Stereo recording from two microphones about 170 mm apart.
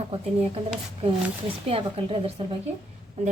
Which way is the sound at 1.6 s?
35° right (ahead or behind).